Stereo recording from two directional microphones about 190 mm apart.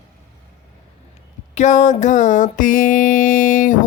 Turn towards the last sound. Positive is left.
turn(degrees=45)  # may be behind; listen again after turning